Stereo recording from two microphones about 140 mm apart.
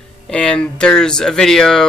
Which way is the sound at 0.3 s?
5° left (ahead or behind).